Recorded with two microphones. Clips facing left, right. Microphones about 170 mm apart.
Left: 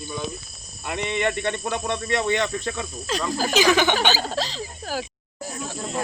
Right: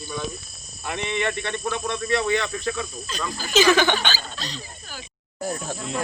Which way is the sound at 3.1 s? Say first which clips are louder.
Left 6 dB; 90° left.